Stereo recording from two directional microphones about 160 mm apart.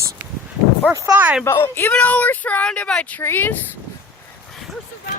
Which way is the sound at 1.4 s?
15° left (ahead or behind).